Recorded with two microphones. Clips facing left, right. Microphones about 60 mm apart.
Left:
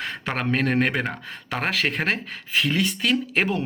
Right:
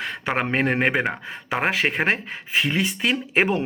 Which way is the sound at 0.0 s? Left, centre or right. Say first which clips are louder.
Right 3 dB; centre.